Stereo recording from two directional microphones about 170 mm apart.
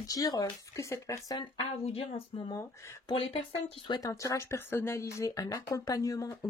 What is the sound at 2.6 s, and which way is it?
Speech, 15° left (ahead or behind).